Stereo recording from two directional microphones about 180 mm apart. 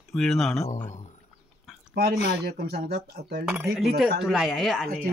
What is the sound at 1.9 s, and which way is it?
Speech, 60° right (ahead or behind).